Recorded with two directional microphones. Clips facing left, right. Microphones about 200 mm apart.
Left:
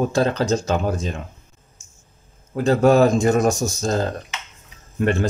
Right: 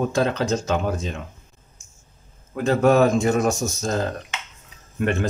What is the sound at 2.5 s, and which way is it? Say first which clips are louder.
Speech: left 2 dB; 35° left (ahead or behind).